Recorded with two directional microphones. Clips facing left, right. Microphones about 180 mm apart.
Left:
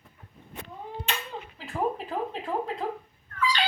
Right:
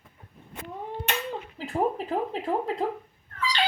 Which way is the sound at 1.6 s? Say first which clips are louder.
Right 2 dB; 35° right (ahead or behind).